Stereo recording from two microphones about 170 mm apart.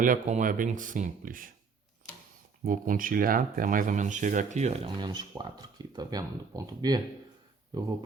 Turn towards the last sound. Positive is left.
turn(degrees=-25)  # may be behind; listen again after turning